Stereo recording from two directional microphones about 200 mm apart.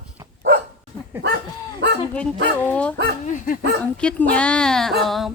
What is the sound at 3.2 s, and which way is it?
Dog, 40° left (ahead or behind).